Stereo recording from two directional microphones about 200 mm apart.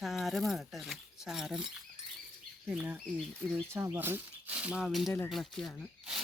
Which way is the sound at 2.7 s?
5° right (ahead or behind).